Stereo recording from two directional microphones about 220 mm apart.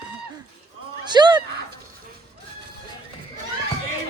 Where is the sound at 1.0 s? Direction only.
20° right (ahead or behind).